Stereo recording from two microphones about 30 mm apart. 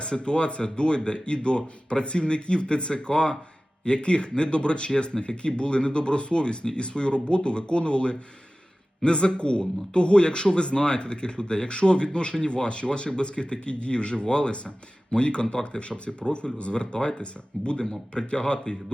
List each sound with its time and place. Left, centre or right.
0.0 s a man's voice: left